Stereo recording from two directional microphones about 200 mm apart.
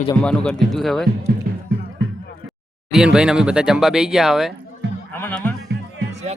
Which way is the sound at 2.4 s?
Centre (ahead or behind).